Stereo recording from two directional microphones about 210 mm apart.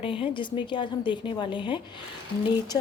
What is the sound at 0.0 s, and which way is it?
A woman's voice, 25° left (ahead or behind).